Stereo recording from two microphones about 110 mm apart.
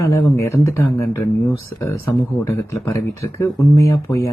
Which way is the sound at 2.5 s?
25° left (ahead or behind).